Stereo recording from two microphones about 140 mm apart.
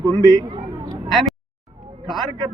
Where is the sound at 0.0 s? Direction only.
25° right (ahead or behind).